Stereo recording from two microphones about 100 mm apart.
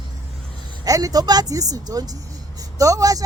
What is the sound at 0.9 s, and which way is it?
A woman's voice, 35° right (ahead or behind).